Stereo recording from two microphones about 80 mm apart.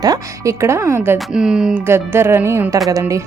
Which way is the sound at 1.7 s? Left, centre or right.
Right.